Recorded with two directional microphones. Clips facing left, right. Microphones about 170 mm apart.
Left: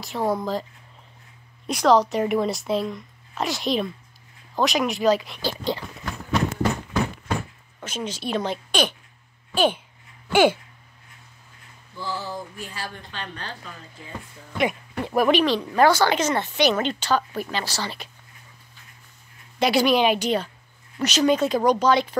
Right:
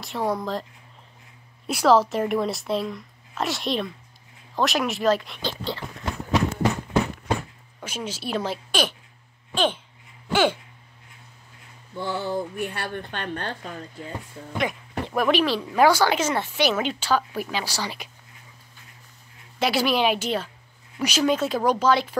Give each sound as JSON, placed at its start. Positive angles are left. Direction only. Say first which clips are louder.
{"t": 0.0, "sound": "speech", "louder": "left 2 dB", "side_deg": 0}
{"t": 1.7, "sound": "speech", "louder": "even", "side_deg": -5}
{"t": 7.8, "sound": "speech", "louder": "left 2 dB", "side_deg": -10}
{"t": 9.5, "sound": "speech", "louder": "left 3 dB", "side_deg": 10}
{"t": 12.0, "sound": "a woman's voice", "louder": "right 4 dB", "side_deg": -60}
{"t": 14.6, "sound": "speech", "louder": "left 3 dB", "side_deg": 5}
{"t": 15.4, "sound": "speech", "louder": "left 1 dB", "side_deg": -5}
{"t": 19.6, "sound": "speech", "louder": "left 3 dB", "side_deg": -5}